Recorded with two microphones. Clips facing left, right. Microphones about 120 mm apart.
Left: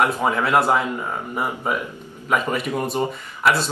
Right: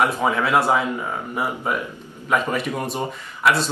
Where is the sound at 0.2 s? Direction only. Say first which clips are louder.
Even; centre (ahead or behind).